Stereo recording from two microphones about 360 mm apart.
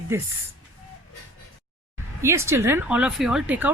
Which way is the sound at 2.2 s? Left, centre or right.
Centre.